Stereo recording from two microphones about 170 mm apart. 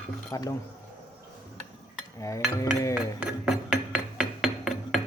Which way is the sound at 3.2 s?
5° right (ahead or behind).